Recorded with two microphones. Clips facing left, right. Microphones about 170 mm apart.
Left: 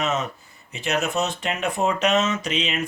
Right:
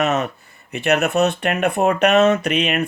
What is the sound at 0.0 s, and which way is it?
Speech, 65° right (ahead or behind).